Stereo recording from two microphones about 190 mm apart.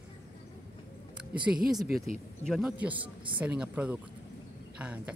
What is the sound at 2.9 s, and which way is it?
Speech, 25° right (ahead or behind).